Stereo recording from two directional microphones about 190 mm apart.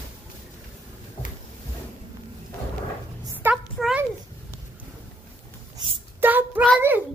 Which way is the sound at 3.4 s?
10° right (ahead or behind).